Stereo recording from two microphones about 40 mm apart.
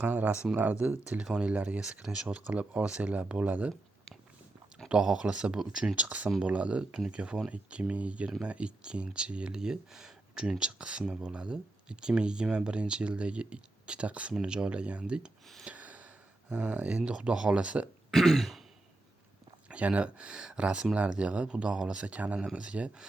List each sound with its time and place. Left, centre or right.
0.0 s speech: right
1.8 s speech: right
2.2 s speech: right
4.9 s speech: centre
6.0 s speech: right; by 10.5 s centre
10.6 s speech: right
15.7 s a sound: right
17.1 s speech: right
18.1 s throat clearing: centre
19.6 s speech: right